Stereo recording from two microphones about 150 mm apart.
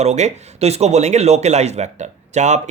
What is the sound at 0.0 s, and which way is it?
Speech, 45° right (ahead or behind).